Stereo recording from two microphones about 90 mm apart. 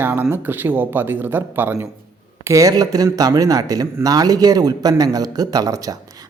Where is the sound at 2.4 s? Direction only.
40° right (ahead or behind).